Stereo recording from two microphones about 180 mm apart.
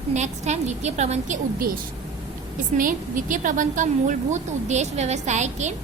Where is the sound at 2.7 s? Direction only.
45° right (ahead or behind).